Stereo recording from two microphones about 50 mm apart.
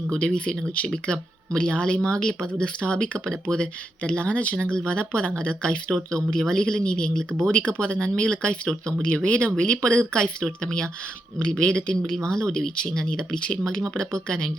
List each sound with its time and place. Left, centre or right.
0.1 s speech: centre